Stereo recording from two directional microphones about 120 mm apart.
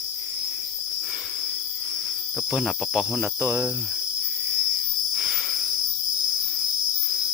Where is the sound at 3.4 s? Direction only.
25° right (ahead or behind).